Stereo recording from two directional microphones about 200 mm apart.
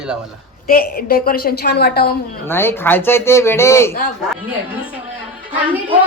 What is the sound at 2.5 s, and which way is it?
Speech, 10° left (ahead or behind).